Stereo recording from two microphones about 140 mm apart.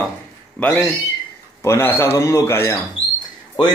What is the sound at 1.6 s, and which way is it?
A man's voice, 15° left (ahead or behind).